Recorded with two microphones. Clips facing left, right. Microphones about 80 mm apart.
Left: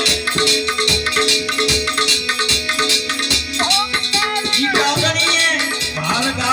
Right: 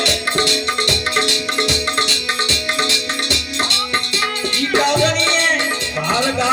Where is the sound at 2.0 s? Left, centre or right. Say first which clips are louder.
Left 1 dB; left.